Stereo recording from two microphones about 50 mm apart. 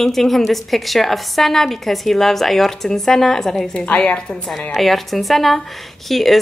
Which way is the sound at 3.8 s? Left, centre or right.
Left.